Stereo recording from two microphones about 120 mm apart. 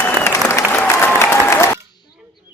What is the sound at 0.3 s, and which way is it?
Applause, 25° left (ahead or behind).